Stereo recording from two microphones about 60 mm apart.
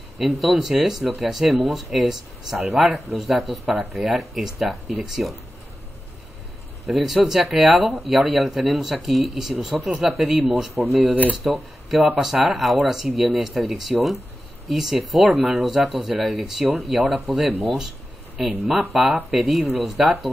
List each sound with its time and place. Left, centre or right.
0.2 s speech: centre
6.9 s speech: centre
11.1 s speech: right
11.4 s speech: centre